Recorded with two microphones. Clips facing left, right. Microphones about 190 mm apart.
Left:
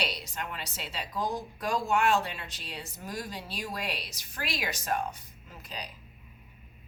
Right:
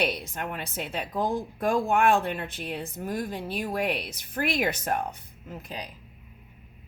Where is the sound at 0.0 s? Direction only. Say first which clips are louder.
Right 7 dB; 55° right (ahead or behind).